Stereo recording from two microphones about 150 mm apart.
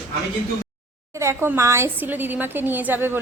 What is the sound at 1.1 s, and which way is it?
A woman's voice, 20° right (ahead or behind).